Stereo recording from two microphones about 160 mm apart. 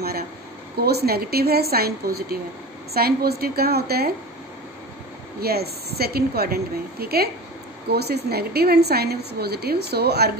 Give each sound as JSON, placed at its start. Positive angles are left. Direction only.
{"t": 0.8, "sound": "a woman's voice", "side_deg": -75}
{"t": 5.4, "sound": "a woman's voice", "side_deg": -75}